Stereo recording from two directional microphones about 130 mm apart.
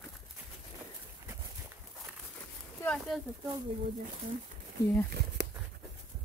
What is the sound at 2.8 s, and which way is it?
Speech, 5° left (ahead or behind).